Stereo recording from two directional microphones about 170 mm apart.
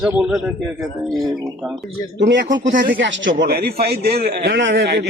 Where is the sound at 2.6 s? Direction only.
55° right (ahead or behind).